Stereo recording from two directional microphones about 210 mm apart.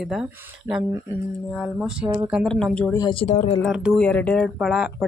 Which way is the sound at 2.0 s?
15° right (ahead or behind).